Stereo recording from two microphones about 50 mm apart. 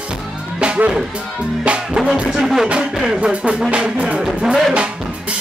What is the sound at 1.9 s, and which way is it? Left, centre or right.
Music, centre.